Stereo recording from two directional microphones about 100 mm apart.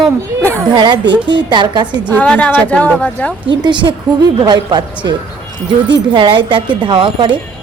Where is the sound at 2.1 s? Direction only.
15° left (ahead or behind).